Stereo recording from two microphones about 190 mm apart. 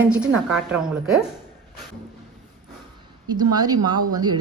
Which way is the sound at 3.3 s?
20° right (ahead or behind).